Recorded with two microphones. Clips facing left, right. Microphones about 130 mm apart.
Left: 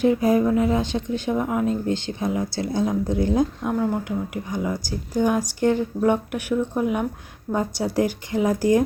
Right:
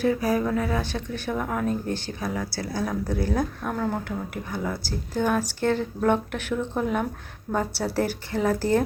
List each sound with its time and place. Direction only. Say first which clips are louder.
0.0 s a woman's voice: left 5 dB; 20° left (ahead or behind)